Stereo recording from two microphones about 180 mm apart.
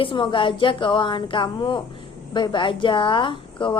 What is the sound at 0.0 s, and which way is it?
A woman's voice, 25° left (ahead or behind).